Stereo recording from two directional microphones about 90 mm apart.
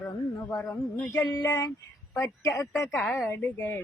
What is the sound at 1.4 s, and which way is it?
Speech, 40° left (ahead or behind).